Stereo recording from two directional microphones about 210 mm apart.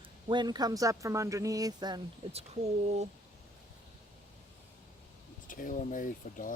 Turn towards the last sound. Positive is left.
turn(degrees=40)  # may be behind; listen again after turning